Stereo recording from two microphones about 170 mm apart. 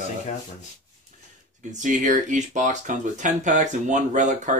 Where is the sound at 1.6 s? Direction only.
45° right (ahead or behind).